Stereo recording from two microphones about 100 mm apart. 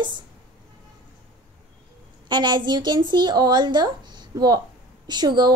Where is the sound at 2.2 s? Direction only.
50° right (ahead or behind).